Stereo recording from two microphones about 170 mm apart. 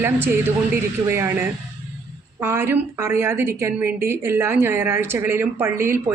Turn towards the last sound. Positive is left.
turn(degrees=-15)  # may be behind; listen again after turning